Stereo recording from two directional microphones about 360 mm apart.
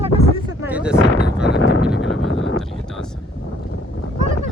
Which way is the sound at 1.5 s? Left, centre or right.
Left.